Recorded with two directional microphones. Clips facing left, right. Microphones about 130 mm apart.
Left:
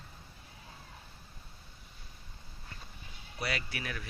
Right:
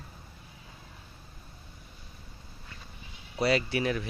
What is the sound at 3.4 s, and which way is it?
Speech, 25° right (ahead or behind).